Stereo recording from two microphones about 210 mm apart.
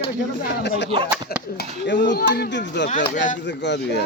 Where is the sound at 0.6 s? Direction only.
55° left (ahead or behind).